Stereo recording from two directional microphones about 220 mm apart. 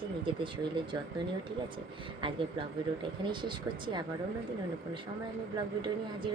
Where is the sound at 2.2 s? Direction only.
20° right (ahead or behind).